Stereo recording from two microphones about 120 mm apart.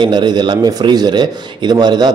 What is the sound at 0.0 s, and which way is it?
Speech, 40° right (ahead or behind).